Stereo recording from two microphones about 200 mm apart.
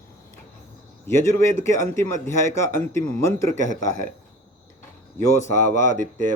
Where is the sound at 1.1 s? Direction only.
15° left (ahead or behind).